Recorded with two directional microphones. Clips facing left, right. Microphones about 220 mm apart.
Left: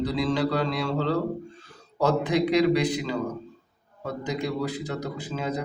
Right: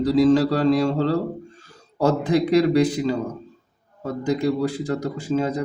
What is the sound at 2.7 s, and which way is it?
A man's voice, 45° right (ahead or behind).